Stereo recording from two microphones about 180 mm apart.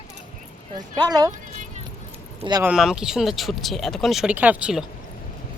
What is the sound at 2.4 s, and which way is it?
Speech, 20° right (ahead or behind).